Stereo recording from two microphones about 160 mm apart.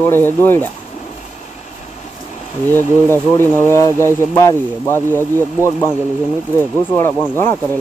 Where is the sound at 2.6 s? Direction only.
15° left (ahead or behind).